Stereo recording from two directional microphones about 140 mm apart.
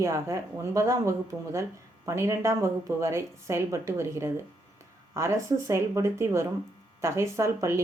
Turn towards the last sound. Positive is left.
turn(degrees=-20)  # may be behind; listen again after turning